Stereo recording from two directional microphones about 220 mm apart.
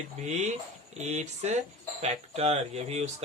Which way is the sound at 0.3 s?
30° right (ahead or behind).